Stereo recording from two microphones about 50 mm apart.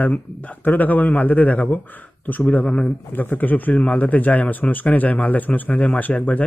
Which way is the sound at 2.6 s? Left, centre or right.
Left.